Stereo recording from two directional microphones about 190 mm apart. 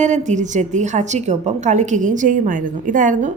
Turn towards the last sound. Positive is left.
turn(degrees=-40)  # may be behind; listen again after turning